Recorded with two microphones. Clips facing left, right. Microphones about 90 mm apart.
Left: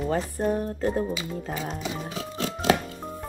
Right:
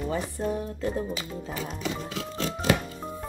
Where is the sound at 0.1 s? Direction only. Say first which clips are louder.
Left 5 dB; 55° left (ahead or behind).